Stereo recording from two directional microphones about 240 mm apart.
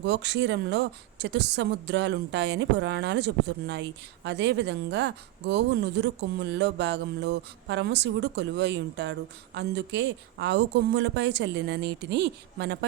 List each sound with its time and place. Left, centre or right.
0.0 s a woman's voice: right